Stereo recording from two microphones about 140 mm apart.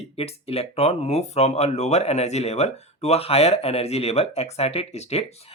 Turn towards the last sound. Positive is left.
turn(degrees=50)  # may be behind; listen again after turning